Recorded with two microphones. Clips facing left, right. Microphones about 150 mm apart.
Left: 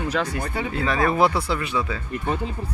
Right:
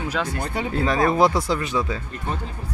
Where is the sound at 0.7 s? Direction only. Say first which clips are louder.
Right 2 dB; 35° right (ahead or behind).